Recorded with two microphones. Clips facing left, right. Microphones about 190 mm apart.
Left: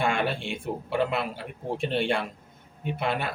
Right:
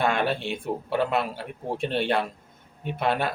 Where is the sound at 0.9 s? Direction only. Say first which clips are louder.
Right 2 dB; 40° right (ahead or behind).